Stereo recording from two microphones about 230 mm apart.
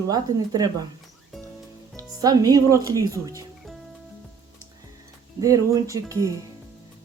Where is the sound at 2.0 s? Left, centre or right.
Centre.